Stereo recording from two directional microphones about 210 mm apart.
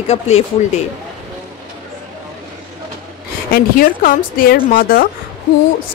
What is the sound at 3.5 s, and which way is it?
A woman's voice, 45° left (ahead or behind).